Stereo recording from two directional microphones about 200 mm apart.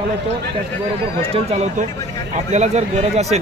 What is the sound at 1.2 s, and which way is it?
Speech, 30° right (ahead or behind).